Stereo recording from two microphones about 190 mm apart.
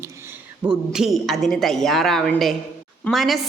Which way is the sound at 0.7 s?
Centre (ahead or behind).